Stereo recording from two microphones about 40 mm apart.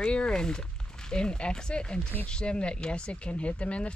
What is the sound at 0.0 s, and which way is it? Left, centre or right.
Speech, left.